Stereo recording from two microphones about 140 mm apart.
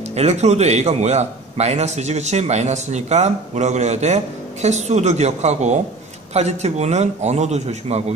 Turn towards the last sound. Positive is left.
turn(degrees=-50)  # may be behind; listen again after turning